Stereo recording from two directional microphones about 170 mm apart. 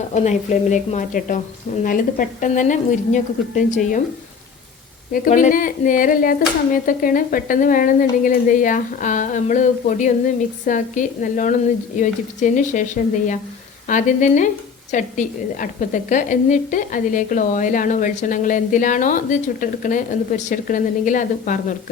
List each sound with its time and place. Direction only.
0.1 s a woman's voice: 45° left (ahead or behind)
5.1 s a woman's voice: 50° left (ahead or behind)